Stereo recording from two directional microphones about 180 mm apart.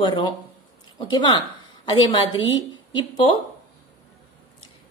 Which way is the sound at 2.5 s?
25° left (ahead or behind).